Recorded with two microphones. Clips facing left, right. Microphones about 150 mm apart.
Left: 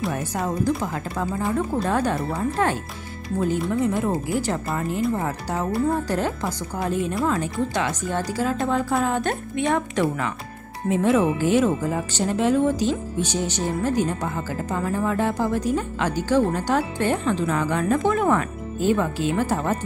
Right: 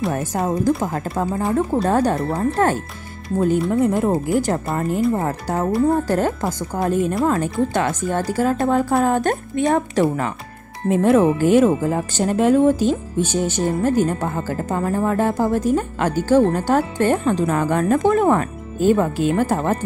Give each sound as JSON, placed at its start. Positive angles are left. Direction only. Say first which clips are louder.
{"t": 0.1, "sound": "speech", "louder": "right 4 dB", "side_deg": -45}
{"t": 3.8, "sound": "speech", "louder": "right 5 dB", "side_deg": -40}